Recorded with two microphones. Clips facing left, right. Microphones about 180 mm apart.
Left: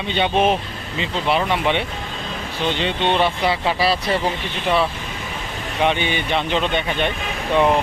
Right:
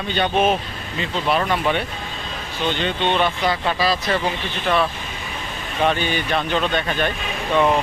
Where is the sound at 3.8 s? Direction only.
30° left (ahead or behind).